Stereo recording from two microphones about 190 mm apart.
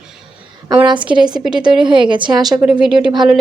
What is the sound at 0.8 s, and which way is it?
A woman's voice, 25° right (ahead or behind).